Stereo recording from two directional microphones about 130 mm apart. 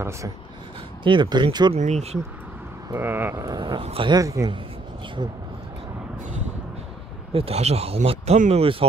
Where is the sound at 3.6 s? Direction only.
45° right (ahead or behind).